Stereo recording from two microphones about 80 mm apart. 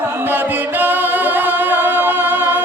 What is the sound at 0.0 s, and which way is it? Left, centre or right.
Music, right.